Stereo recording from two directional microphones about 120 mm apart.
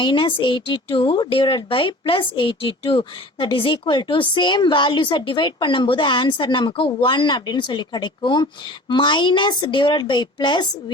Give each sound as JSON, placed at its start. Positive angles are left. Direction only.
{"t": 0.0, "sound": "a woman's voice", "side_deg": 45}